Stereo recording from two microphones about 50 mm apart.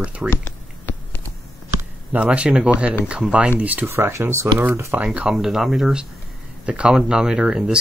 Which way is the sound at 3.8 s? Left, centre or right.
Right.